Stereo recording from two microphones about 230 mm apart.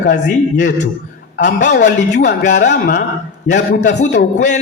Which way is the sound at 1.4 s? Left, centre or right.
Left.